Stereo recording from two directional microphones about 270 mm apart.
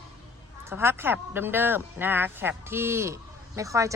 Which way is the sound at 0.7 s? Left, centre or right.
Centre.